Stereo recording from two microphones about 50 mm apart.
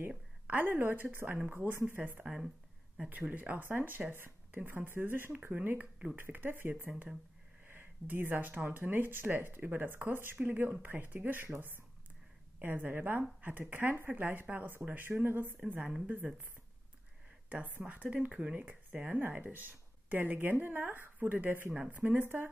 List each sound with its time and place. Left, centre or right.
0.5 s a woman's voice: right
3.3 s speech: right
3.6 s speech: right
5.5 s a woman's voice: right
7.6 s a sound: right
8.6 s a woman's voice: right
12.6 s speech: right
16.1 s a woman's voice: right
17.5 s a woman's voice: right
19.0 s a woman's voice: right